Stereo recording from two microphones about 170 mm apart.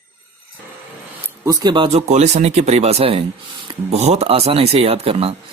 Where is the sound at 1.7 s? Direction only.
35° right (ahead or behind).